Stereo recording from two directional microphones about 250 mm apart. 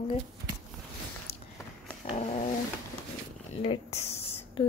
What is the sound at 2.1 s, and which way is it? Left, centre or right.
Dog, left.